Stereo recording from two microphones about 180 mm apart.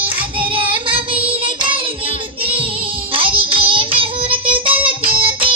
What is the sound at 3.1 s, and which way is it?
Child singing, 30° right (ahead or behind).